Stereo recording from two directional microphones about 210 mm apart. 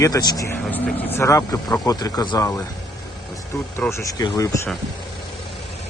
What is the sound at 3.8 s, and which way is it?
Speech, 15° left (ahead or behind).